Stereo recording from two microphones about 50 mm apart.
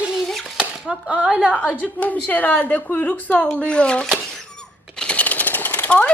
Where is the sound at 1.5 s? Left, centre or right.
Left.